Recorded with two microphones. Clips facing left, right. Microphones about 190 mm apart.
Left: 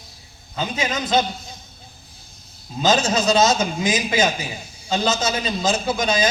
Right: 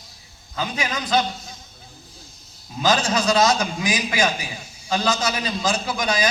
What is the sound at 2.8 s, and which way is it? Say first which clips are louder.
A man's voice: left 2 dB; 25° left (ahead or behind).